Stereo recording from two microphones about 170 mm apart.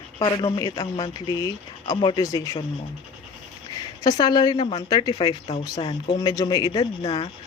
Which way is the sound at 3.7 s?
20° left (ahead or behind).